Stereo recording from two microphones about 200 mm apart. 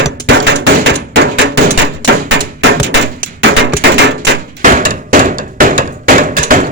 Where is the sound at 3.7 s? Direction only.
55° right (ahead or behind).